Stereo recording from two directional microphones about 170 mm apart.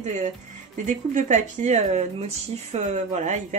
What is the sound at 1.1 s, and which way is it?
Speech, 45° right (ahead or behind).